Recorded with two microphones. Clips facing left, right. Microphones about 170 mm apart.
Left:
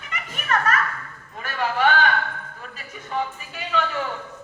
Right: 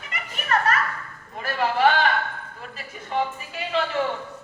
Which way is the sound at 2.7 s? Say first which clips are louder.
Right 2 dB; 35° right (ahead or behind).